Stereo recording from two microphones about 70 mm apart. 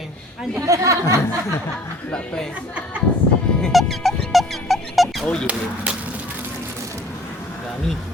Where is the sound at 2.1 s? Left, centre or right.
Centre.